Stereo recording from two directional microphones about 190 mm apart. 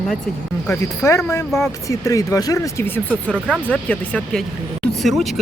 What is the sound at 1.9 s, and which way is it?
Speech, 15° left (ahead or behind).